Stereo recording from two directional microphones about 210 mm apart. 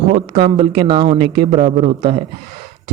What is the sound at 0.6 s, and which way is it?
A man's voice, 20° right (ahead or behind).